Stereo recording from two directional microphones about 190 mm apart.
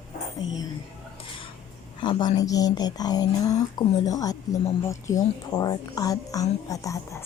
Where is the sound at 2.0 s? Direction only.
25° left (ahead or behind).